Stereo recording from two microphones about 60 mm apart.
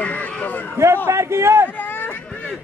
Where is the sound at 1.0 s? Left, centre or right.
Right.